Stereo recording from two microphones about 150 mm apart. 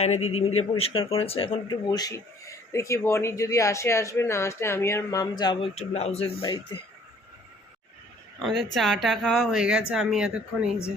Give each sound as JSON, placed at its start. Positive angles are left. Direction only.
{"t": 0.0, "sound": "speech", "side_deg": 45}
{"t": 1.9, "sound": "speech", "side_deg": 25}
{"t": 5.7, "sound": "speech", "side_deg": 45}
{"t": 6.4, "sound": "speech", "side_deg": 30}
{"t": 8.4, "sound": "speech", "side_deg": 0}